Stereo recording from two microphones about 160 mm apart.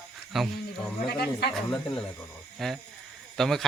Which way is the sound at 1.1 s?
80° left.